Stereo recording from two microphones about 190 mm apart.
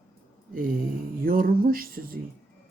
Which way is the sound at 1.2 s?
50° right (ahead or behind).